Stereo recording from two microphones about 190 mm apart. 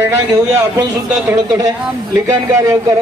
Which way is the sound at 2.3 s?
15° right (ahead or behind).